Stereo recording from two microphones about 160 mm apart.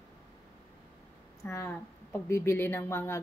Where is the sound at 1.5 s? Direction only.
15° left (ahead or behind).